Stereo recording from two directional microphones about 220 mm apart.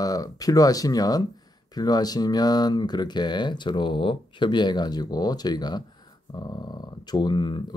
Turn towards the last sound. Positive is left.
turn(degrees=20)  # may be behind; listen again after turning